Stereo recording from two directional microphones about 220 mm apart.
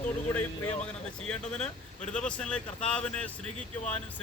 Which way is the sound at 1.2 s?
5° left (ahead or behind).